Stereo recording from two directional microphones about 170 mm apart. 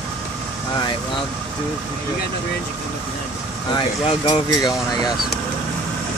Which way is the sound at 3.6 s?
25° left (ahead or behind).